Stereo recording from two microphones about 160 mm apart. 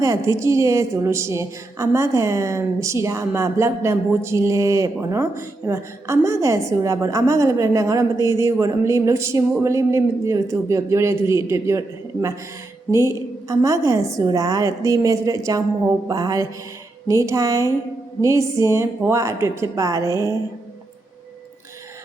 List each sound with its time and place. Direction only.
0.0 s a woman's voice: 20° right (ahead or behind)
12.9 s a woman's voice: 15° right (ahead or behind)